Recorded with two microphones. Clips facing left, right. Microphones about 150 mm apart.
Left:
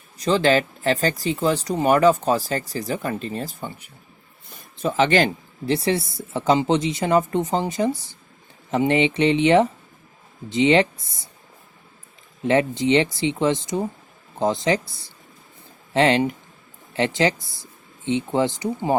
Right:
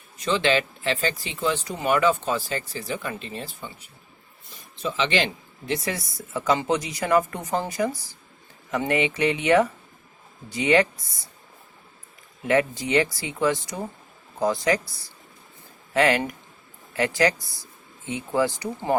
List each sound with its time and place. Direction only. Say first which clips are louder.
0.2 s speech: left 4 dB; 35° left (ahead or behind)
4.8 s speech: left 6 dB; 50° left (ahead or behind)
5.7 s a woman's voice: left 6 dB; 30° left (ahead or behind)
12.5 s a woman's voice: left 4 dB; 25° left (ahead or behind)